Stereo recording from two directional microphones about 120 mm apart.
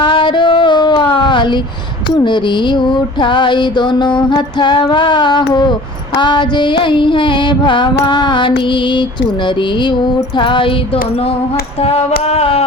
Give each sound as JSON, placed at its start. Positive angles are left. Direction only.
{"t": 0.0, "sound": "a sound", "side_deg": 45}
{"t": 2.2, "sound": "mantra", "side_deg": 40}
{"t": 6.1, "sound": "music", "side_deg": 40}
{"t": 9.6, "sound": "mantra", "side_deg": 40}
{"t": 10.3, "sound": "music", "side_deg": 45}
{"t": 11.8, "sound": "a sound", "side_deg": 55}